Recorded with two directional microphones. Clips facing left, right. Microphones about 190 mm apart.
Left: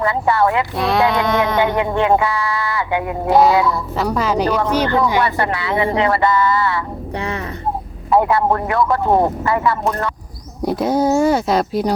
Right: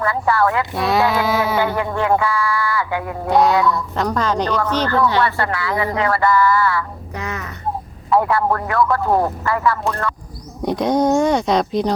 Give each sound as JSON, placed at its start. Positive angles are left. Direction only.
{"t": 0.0, "sound": "speech", "side_deg": 20}
{"t": 0.8, "sound": "speech", "side_deg": 0}
{"t": 1.5, "sound": "speech", "side_deg": 20}
{"t": 3.2, "sound": "a woman's voice", "side_deg": 0}
{"t": 10.7, "sound": "speech", "side_deg": 5}